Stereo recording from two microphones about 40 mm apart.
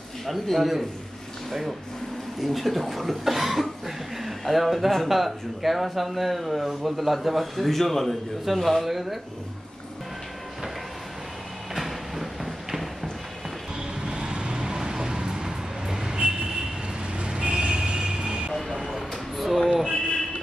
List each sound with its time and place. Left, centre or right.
0.3 s speech: centre
2.4 s speech: centre
11.7 s clip-clop: centre
14.0 s vehicle: right
18.8 s a sound: centre